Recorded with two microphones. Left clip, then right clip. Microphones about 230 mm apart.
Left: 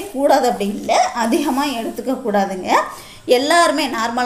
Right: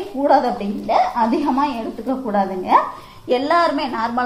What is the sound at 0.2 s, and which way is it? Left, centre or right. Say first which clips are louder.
A woman's voice: left 1 dB; left.